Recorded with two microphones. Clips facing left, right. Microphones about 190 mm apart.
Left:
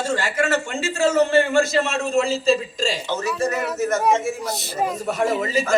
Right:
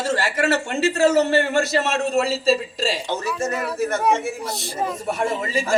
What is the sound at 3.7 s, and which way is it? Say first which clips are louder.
Speech: even; 30° right (ahead or behind).